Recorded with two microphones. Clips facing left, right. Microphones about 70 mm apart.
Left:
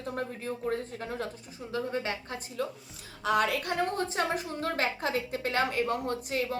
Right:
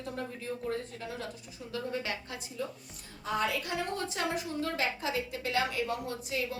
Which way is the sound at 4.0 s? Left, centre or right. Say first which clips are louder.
Left 4 dB; left.